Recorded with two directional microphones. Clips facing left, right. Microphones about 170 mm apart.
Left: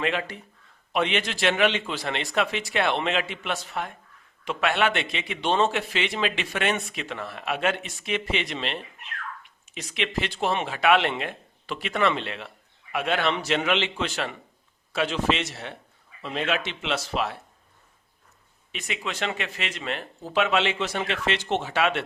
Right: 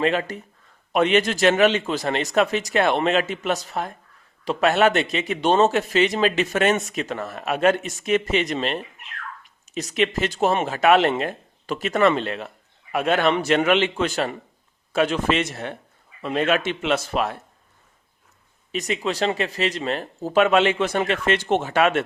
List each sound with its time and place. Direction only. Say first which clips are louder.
0.0 s speech: right 6 dB; 40° right (ahead or behind)
18.7 s speech: right 8 dB; 40° right (ahead or behind)